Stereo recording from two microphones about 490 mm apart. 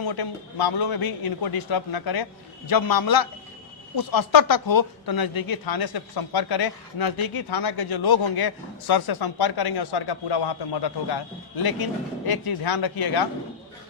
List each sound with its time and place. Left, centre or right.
0.1 s speech: left